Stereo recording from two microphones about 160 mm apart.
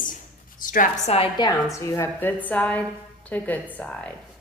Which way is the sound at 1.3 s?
20° left (ahead or behind).